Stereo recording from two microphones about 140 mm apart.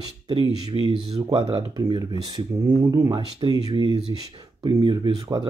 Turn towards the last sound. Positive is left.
turn(degrees=-30)  # may be behind; listen again after turning